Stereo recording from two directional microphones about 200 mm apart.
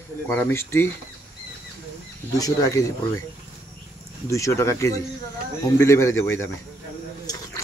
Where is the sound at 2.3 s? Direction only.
15° left (ahead or behind).